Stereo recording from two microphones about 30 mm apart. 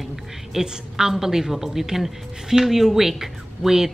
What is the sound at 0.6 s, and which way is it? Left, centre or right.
A woman's voice, centre.